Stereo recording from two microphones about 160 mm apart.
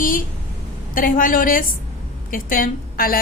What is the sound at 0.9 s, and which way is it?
A woman's voice, 60° left (ahead or behind).